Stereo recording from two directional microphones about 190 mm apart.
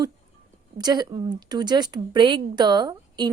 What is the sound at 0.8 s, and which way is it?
A woman's voice, 20° right (ahead or behind).